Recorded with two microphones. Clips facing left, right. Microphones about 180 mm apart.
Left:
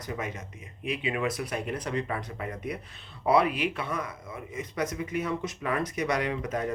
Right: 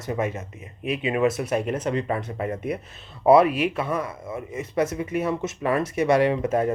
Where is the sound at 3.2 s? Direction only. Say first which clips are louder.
Right 8 dB; 45° right (ahead or behind).